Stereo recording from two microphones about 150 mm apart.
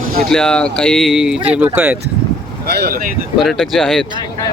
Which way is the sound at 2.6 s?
90° right.